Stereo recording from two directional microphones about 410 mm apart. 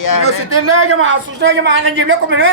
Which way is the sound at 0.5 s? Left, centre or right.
Right.